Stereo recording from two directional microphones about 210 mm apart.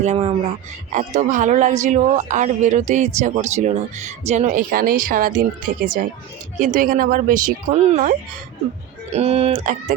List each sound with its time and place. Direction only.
0.0 s speech: 30° right (ahead or behind)
9.1 s speech: 30° right (ahead or behind)